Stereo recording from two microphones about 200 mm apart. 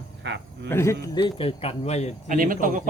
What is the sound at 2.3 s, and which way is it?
Speech, 45° right (ahead or behind).